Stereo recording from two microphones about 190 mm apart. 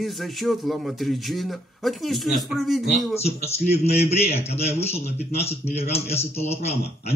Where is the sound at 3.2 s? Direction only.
35° left (ahead or behind).